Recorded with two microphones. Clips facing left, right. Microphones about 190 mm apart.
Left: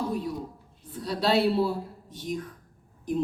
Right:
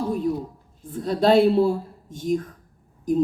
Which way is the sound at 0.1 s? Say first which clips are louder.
Right 7 dB; 50° right (ahead or behind).